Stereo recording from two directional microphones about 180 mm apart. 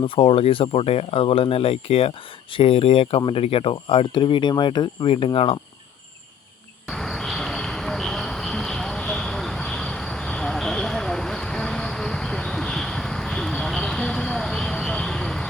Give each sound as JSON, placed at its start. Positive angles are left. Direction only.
{"t": 0.2, "sound": "speech", "side_deg": 30}
{"t": 6.8, "sound": "vehicle", "side_deg": 0}